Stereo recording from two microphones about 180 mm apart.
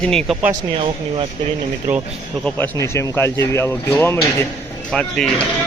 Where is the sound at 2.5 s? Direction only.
10° left (ahead or behind).